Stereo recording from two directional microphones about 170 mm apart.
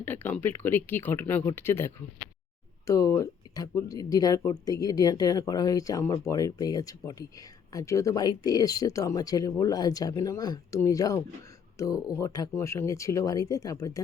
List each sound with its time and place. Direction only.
0.0 s speech: 10° left (ahead or behind)